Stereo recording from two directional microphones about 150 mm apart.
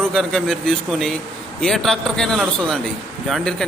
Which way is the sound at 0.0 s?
5° left (ahead or behind).